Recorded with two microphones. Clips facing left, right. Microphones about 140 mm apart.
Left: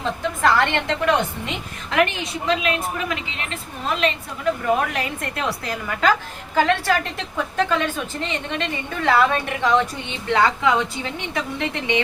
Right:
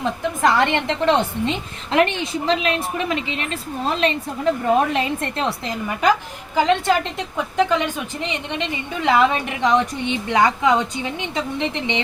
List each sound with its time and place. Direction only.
0.0 s a woman's voice: 15° right (ahead or behind)